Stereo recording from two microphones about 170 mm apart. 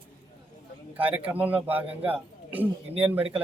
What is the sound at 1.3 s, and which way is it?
Speech, 10° right (ahead or behind).